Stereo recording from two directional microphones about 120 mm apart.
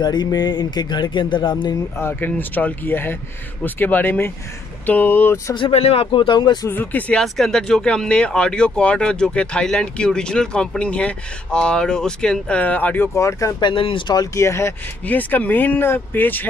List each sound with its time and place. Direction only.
0.0 s speech: 35° left (ahead or behind)
2.0 s speech: 20° left (ahead or behind)
5.7 s speech: 55° left (ahead or behind); by 6.7 s 40° left (ahead or behind)
6.7 s speech: 15° left (ahead or behind)
13.6 s speech: 45° left (ahead or behind); by 14.7 s 25° left (ahead or behind)
15.0 s speech: 15° left (ahead or behind)